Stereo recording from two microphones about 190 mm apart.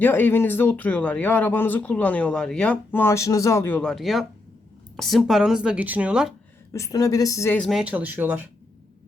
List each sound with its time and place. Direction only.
0.0 s speech: 10° left (ahead or behind)
6.7 s speech: 15° left (ahead or behind)
7.6 s speech: centre (ahead or behind)